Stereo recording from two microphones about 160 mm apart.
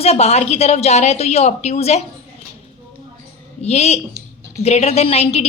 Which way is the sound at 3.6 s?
45° left (ahead or behind).